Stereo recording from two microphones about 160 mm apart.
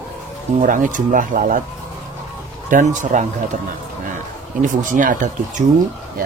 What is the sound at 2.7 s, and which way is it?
Speech, 50° right (ahead or behind).